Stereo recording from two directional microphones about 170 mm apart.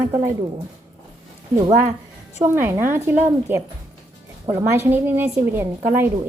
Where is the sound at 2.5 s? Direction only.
15° right (ahead or behind).